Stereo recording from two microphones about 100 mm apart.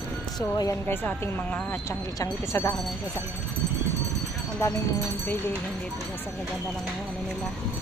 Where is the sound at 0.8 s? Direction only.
20° left (ahead or behind).